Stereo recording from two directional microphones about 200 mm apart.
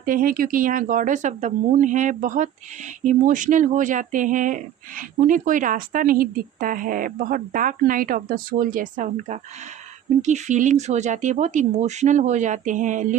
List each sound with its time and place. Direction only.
0.0 s speech: 45° right (ahead or behind)